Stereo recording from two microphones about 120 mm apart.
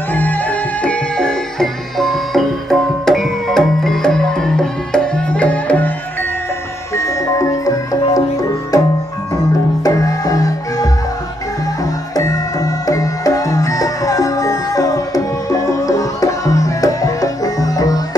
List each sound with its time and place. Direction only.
0.1 s music: 15° left (ahead or behind)
7.0 s music: 25° left (ahead or behind)
9.8 s music: 30° left (ahead or behind)